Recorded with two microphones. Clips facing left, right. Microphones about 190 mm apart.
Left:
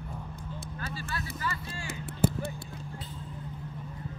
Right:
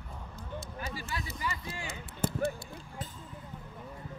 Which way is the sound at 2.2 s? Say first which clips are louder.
Left 6 dB; 10° left (ahead or behind).